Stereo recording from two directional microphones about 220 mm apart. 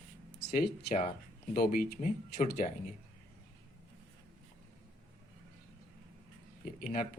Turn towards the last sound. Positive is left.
turn(degrees=40)  # may be behind; listen again after turning